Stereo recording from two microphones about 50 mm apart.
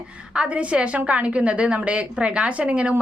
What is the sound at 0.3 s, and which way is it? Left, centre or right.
Speech, right.